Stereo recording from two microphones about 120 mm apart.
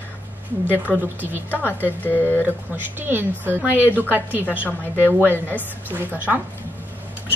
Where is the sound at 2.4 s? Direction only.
15° right (ahead or behind).